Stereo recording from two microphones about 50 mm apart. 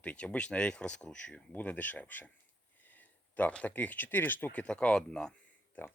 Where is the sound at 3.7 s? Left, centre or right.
Left.